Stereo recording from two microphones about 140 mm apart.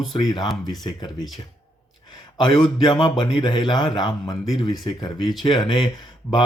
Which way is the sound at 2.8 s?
30° left (ahead or behind).